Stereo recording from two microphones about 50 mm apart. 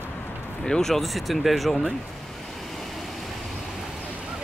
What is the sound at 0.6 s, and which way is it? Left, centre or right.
Speech, centre.